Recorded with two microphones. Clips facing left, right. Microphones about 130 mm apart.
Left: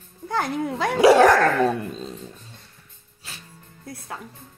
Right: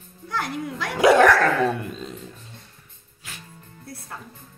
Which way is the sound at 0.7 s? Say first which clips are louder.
Left 2 dB; 30° left (ahead or behind).